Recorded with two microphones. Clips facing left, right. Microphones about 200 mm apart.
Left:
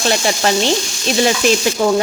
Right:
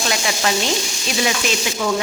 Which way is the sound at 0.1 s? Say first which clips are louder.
Left 6 dB; 35° left (ahead or behind).